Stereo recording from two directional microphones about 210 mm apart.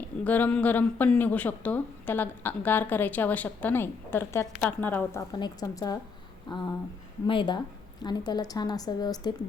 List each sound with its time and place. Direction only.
0.3 s a woman's voice: 5° left (ahead or behind)